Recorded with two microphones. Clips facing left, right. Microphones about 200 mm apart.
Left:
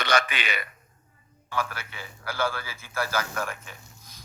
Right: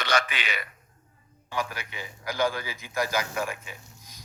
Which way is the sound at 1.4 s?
15° right (ahead or behind).